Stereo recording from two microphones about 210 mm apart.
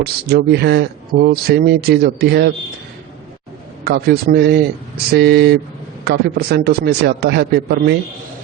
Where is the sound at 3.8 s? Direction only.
50° right (ahead or behind).